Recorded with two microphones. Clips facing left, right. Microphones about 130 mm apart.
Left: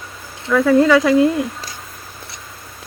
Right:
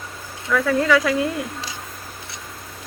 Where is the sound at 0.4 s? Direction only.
25° left (ahead or behind).